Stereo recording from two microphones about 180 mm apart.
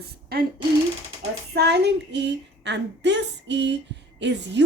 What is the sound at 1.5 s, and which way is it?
Speech, 65° right (ahead or behind).